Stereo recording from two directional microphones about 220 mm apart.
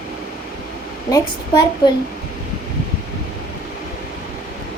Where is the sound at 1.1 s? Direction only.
15° left (ahead or behind).